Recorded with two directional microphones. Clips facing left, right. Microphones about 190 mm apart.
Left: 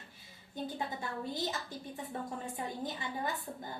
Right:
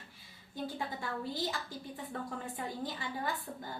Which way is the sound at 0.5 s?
20° left (ahead or behind).